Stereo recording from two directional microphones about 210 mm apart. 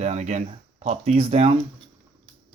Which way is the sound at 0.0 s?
35° right (ahead or behind).